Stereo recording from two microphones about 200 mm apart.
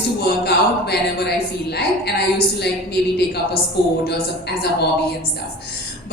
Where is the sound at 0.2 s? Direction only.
55° left (ahead or behind).